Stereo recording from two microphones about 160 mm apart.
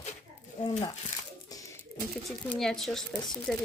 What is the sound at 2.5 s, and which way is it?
Speech, 5° left (ahead or behind).